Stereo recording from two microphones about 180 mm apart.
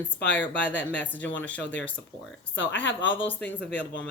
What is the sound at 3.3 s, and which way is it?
Speech, 10° left (ahead or behind).